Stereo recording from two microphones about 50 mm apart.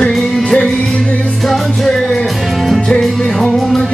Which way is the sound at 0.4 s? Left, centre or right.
Centre.